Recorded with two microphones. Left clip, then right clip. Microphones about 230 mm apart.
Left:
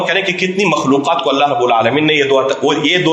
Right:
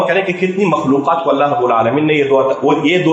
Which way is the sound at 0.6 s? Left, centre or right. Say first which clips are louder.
Even; left.